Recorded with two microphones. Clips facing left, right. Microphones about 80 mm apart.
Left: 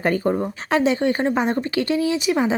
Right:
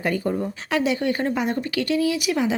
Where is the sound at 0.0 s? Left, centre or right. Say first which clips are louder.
Left 3 dB; left.